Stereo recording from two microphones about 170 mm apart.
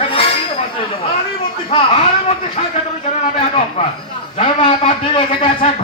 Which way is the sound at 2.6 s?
40° left (ahead or behind).